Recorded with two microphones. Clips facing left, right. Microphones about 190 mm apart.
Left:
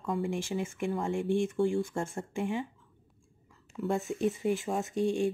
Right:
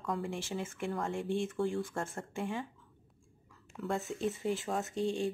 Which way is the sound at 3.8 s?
15° left (ahead or behind).